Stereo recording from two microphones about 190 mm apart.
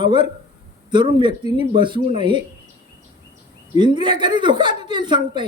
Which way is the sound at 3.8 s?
25° right (ahead or behind).